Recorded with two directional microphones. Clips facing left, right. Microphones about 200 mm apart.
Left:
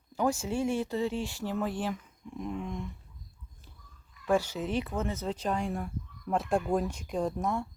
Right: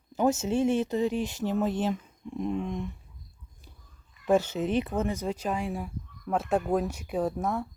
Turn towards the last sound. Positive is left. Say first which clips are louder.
# right 2 dB
turn(degrees=-5)  # may be behind; listen again after turning